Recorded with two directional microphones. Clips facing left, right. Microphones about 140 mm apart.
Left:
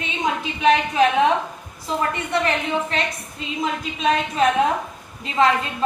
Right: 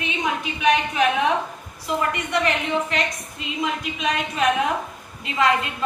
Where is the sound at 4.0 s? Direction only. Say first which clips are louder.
Left 5 dB; 30° left (ahead or behind).